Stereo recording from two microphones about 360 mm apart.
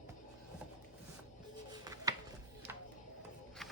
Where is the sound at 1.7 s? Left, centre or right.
Centre.